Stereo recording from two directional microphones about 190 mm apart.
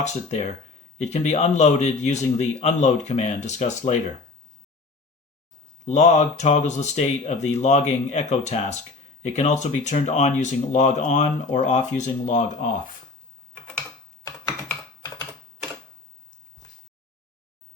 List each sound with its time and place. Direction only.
0.0 s speech: 35° left (ahead or behind)
5.8 s speech: 35° left (ahead or behind)